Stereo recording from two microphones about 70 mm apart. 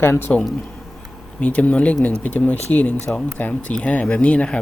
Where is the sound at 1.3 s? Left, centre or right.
Left.